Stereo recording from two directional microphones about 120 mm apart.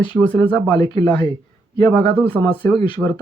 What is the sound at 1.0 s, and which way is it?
Speech, 20° left (ahead or behind).